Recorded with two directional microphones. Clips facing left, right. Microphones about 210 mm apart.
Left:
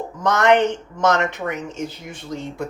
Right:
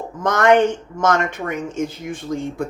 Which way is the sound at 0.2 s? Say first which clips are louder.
Right 2 dB; 50° right (ahead or behind).